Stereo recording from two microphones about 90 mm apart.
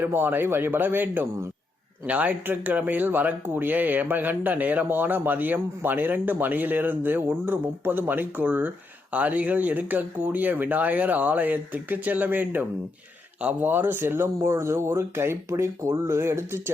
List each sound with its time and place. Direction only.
0.0 s speech: 25° right (ahead or behind)